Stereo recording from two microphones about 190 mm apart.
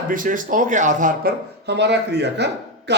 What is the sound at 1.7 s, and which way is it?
A man's voice, 65° right (ahead or behind).